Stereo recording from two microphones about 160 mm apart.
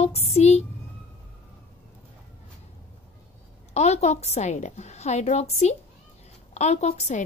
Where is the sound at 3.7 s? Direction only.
45° left (ahead or behind).